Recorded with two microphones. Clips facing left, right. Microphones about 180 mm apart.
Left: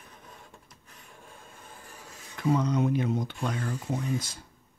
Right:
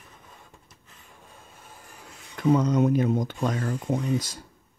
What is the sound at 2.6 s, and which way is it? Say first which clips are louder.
Speech: right 5 dB; 45° right (ahead or behind).